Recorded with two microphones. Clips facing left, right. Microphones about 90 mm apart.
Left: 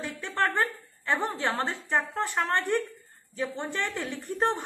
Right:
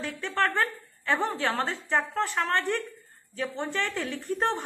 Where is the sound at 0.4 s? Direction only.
20° left (ahead or behind).